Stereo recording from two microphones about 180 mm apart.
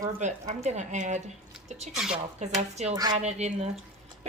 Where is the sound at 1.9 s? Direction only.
Centre (ahead or behind).